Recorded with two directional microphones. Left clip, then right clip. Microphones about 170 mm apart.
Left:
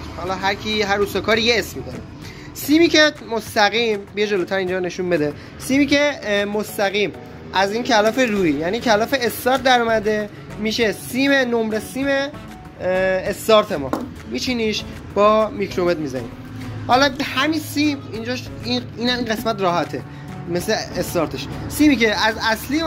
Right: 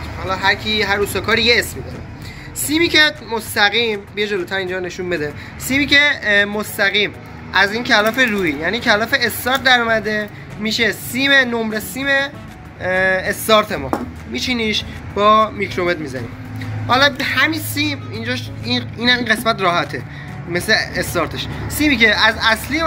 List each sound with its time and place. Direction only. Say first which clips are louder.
0.3 s speech: right 5 dB; 45° left (ahead or behind)
2.7 s speech: even; 50° left (ahead or behind)
12.8 s speech: right 3 dB; 20° left (ahead or behind)
14.4 s speech: right 3 dB; 40° left (ahead or behind)